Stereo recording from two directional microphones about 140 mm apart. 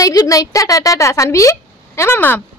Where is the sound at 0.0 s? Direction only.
25° left (ahead or behind).